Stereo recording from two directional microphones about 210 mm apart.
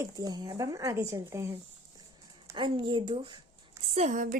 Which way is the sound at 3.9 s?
35° right (ahead or behind).